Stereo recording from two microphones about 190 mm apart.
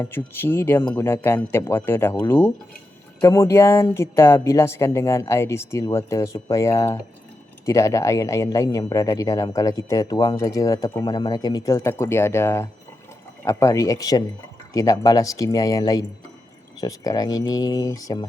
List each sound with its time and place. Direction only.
0.0 s speech: 10° left (ahead or behind)